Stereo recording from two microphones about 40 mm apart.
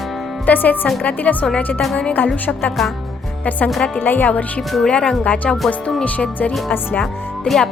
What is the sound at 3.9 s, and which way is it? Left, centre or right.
Speech, left.